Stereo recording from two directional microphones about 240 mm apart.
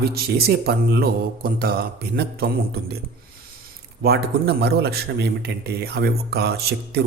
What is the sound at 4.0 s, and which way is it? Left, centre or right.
A man's voice, right.